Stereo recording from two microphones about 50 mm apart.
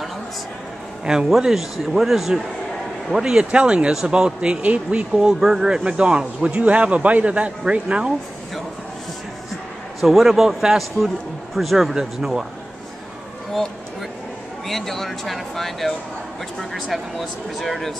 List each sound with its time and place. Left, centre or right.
1.0 s a man's voice: centre
3.2 s speech: centre
5.1 s speech: centre
9.9 s speech: centre
14.7 s a man's voice: centre